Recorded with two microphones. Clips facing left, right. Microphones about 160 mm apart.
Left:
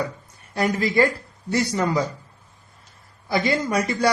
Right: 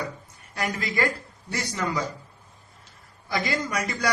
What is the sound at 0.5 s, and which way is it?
A man's voice, 30° left (ahead or behind).